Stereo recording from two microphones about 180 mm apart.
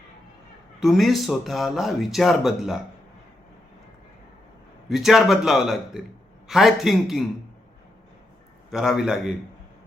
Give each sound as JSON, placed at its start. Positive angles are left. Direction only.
{"t": 0.8, "sound": "speech", "side_deg": 0}
{"t": 4.9, "sound": "speech", "side_deg": 0}
{"t": 8.7, "sound": "speech", "side_deg": 0}